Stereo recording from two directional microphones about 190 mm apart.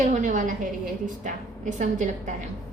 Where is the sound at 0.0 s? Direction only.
40° right (ahead or behind).